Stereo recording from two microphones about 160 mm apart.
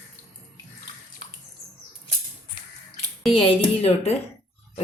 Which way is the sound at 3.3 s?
35° left (ahead or behind).